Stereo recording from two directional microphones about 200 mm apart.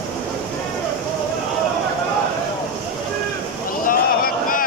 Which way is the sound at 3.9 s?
45° left (ahead or behind).